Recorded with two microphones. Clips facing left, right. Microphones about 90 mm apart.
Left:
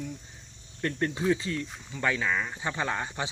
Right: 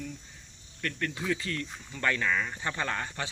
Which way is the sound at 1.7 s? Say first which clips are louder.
Right 1 dB; 10° left (ahead or behind).